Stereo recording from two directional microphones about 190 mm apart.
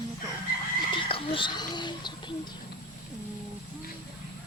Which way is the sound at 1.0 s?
25° left (ahead or behind).